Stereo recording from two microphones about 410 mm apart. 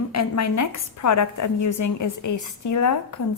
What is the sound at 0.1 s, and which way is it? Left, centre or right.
A woman's voice, left.